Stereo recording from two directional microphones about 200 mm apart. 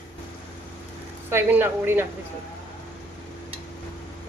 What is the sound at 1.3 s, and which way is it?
Speech, 10° right (ahead or behind).